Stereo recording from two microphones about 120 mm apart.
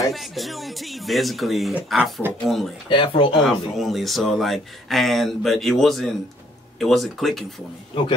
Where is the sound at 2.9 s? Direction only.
45° left (ahead or behind).